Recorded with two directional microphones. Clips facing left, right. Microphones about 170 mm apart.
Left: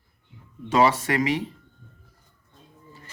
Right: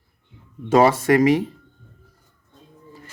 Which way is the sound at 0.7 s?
45° right (ahead or behind).